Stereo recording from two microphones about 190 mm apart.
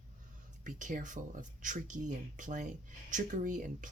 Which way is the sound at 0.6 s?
45° right (ahead or behind).